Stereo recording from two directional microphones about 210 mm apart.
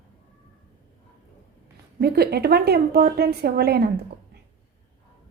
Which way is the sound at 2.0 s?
50° right (ahead or behind).